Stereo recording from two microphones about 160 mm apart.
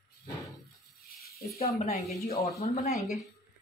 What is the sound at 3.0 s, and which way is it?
Speech, centre (ahead or behind).